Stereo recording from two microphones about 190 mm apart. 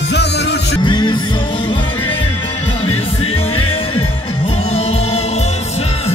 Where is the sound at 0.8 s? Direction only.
25° left (ahead or behind).